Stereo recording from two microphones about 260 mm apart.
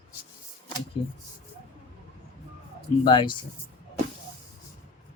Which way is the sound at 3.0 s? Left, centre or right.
Centre.